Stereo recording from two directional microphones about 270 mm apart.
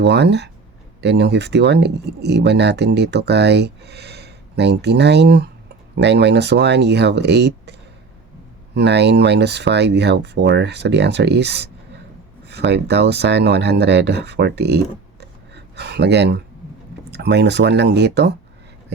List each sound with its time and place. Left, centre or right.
0.0 s speech: right
15.2 s a sound: right
17.1 s speech: right